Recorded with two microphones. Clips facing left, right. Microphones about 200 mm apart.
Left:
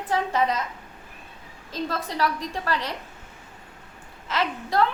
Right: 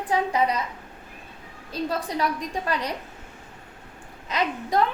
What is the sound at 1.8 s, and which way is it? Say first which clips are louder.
A woman's voice: right 1 dB; 15° right (ahead or behind).